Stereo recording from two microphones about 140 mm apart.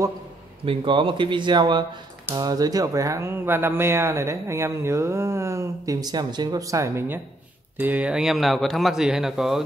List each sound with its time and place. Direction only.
0.7 s speech: 35° right (ahead or behind); by 9.6 s 5° right (ahead or behind)